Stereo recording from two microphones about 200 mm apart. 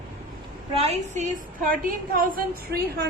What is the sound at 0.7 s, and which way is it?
A woman's voice, 30° right (ahead or behind).